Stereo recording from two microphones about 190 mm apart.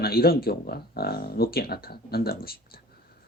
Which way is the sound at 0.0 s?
55° left (ahead or behind).